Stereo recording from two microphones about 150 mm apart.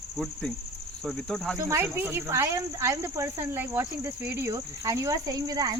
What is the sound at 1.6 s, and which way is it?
Speech, 20° right (ahead or behind).